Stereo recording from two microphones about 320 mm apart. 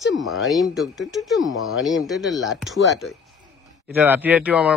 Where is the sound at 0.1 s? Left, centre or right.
Left.